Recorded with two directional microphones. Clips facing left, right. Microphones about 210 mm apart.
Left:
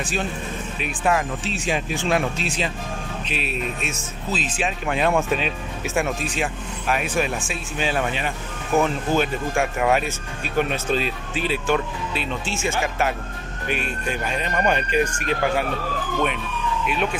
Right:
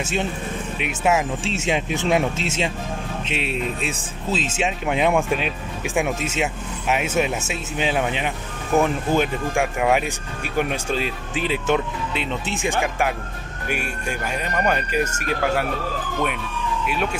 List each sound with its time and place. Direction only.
0.0 s speech: 25° right (ahead or behind)
1.4 s speech: 25° right (ahead or behind)
4.8 s speech: 15° right (ahead or behind)
9.5 s speech: centre (ahead or behind)
10.6 s speech: 10° right (ahead or behind)